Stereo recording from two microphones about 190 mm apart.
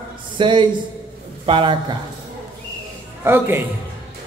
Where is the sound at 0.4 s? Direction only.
25° right (ahead or behind).